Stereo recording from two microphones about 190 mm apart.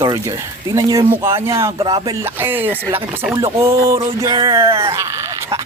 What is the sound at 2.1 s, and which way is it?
Speech, 10° right (ahead or behind).